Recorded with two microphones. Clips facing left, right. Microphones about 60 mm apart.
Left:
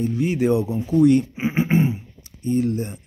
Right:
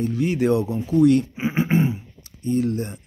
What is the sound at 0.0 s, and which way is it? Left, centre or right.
Speech, centre.